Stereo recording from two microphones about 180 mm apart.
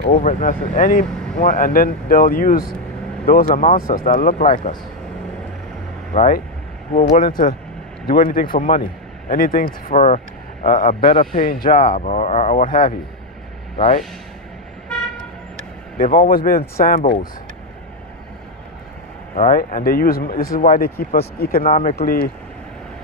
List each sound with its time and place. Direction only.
0.0 s speech: 45° left (ahead or behind)
6.1 s speech: 45° left (ahead or behind)
9.8 s speech: 40° left (ahead or behind)
11.0 s a man's voice: 30° left (ahead or behind)
11.4 s speech: 50° left (ahead or behind)
16.0 s speech: 50° left (ahead or behind)
19.3 s speech: 50° left (ahead or behind)
21.9 s speech: 60° left (ahead or behind)